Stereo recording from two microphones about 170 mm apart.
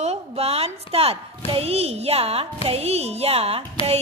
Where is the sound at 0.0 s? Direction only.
35° right (ahead or behind).